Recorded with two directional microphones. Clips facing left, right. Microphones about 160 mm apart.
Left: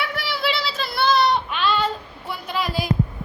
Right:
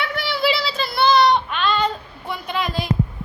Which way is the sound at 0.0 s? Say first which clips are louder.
Right 3 dB; 5° left (ahead or behind).